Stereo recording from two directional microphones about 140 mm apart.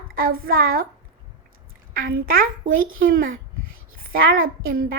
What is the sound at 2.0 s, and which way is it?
Speech, 90° right.